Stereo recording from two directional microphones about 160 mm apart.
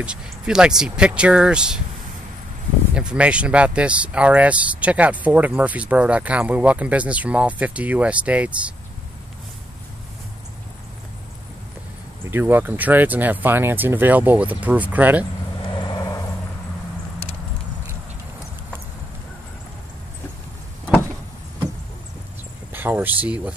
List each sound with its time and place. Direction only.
0.0 s speech: 5° right (ahead or behind)
2.9 s speech: 5° right (ahead or behind)
12.3 s speech: 15° right (ahead or behind)
15.7 s vehicle: 25° left (ahead or behind)
22.7 s speech: 10° right (ahead or behind)